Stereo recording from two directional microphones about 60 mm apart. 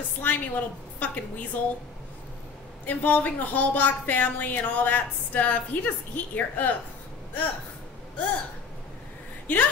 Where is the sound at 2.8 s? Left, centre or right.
Left.